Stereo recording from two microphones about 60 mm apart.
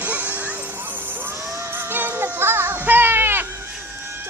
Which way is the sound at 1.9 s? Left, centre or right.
Right.